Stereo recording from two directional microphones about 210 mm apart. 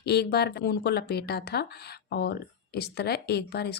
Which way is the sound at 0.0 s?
50° left (ahead or behind).